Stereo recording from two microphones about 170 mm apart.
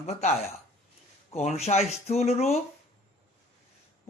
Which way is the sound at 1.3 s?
40° left (ahead or behind).